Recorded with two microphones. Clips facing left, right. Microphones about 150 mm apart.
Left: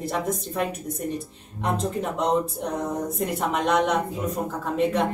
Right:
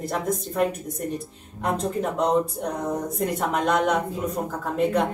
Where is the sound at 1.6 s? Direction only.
Centre (ahead or behind).